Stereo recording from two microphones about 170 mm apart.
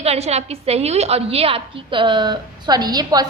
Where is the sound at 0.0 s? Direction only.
40° right (ahead or behind).